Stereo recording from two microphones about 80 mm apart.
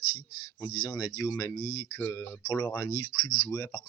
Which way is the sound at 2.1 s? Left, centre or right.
Left.